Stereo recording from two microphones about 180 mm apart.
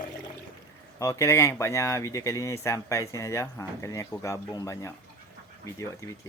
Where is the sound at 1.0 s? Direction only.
15° left (ahead or behind).